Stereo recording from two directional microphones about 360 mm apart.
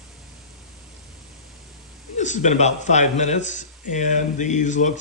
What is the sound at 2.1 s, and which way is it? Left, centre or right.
Speech, centre.